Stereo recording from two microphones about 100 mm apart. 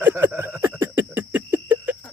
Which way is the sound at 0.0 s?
20° right (ahead or behind).